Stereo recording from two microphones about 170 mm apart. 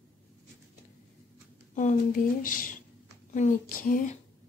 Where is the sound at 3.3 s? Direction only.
50° left (ahead or behind).